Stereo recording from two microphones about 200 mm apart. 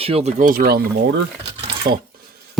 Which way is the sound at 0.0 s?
30° right (ahead or behind).